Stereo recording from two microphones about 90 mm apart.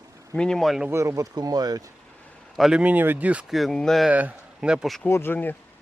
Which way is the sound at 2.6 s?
5° right (ahead or behind).